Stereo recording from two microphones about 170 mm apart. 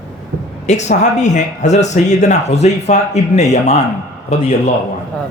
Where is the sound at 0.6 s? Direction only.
45° left (ahead or behind).